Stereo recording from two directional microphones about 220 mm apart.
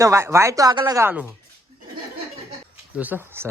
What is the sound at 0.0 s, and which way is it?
Speech, 15° right (ahead or behind).